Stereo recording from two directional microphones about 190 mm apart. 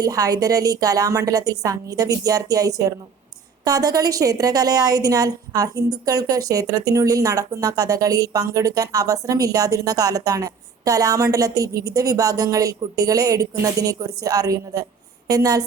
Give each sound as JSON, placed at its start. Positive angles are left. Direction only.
{"t": 0.0, "sound": "a woman's voice", "side_deg": -20}